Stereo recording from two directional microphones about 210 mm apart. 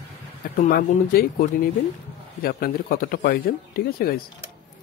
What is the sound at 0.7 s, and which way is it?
Speech, 45° left (ahead or behind).